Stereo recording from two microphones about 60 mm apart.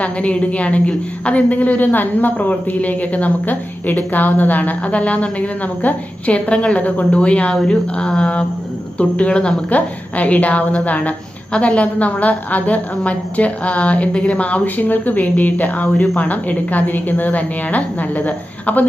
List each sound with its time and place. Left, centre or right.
0.0 s a woman's voice: left